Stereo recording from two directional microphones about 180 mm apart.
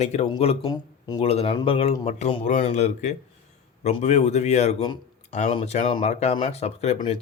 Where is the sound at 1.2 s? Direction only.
35° left (ahead or behind).